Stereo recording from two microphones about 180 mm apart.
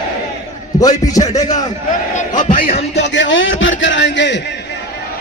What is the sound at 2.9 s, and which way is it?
Speech, 85° left.